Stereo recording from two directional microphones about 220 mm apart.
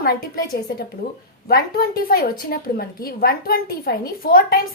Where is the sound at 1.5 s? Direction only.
40° left (ahead or behind).